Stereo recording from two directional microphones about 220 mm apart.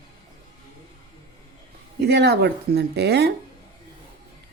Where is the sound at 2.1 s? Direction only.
50° right (ahead or behind).